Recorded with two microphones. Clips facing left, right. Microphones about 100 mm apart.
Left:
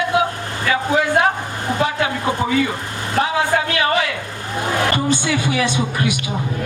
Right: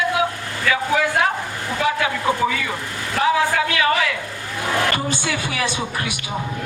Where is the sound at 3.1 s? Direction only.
35° left (ahead or behind).